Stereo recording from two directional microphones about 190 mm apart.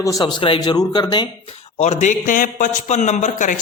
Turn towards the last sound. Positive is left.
turn(degrees=40)  # may be behind; listen again after turning